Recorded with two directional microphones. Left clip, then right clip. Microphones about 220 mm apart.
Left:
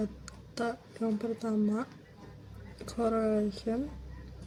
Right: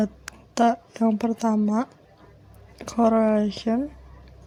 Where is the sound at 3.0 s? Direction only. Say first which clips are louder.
Right 9 dB; 40° right (ahead or behind).